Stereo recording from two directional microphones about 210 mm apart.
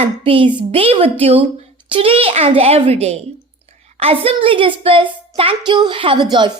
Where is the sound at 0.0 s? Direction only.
25° right (ahead or behind).